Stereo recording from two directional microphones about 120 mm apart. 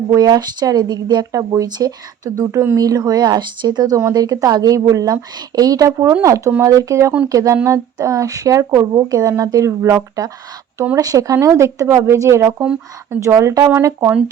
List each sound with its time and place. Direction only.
0.1 s speech: 35° right (ahead or behind)
12.5 s speech: 10° right (ahead or behind)
13.1 s speech: 25° right (ahead or behind)